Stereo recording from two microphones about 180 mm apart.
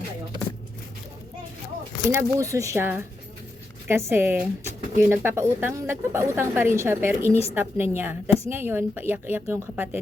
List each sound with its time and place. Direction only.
2.0 s speech: 15° right (ahead or behind)